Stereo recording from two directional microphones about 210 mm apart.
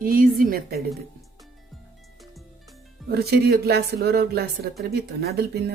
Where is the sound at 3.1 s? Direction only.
50° right (ahead or behind).